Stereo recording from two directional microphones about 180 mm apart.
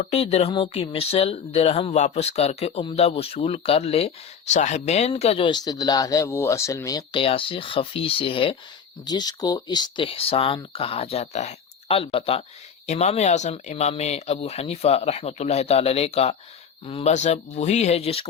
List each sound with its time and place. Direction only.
0.0 s speech: 35° left (ahead or behind)